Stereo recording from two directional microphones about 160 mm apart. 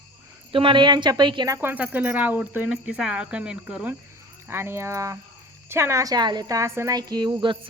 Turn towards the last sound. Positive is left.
turn(degrees=-30)  # may be behind; listen again after turning